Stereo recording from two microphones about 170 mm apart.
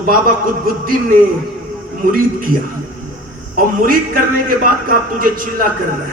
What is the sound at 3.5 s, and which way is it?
A man's voice, 55° right (ahead or behind).